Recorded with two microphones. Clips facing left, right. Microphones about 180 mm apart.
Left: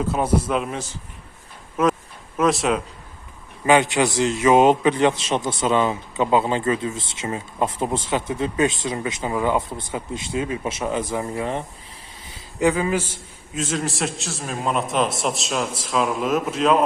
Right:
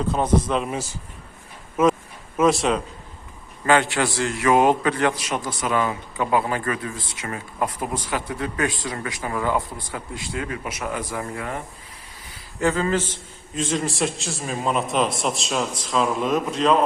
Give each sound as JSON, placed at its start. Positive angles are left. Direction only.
{"t": 0.0, "sound": "speech", "side_deg": 5}
{"t": 1.7, "sound": "a sound", "side_deg": 0}
{"t": 2.4, "sound": "a man's voice", "side_deg": 0}
{"t": 3.7, "sound": "a man's voice", "side_deg": 20}